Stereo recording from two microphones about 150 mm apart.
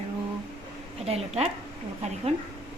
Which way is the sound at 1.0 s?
45° right (ahead or behind).